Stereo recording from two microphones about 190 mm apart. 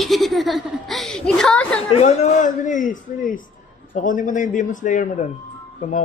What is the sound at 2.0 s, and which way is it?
A man's voice, 35° left (ahead or behind).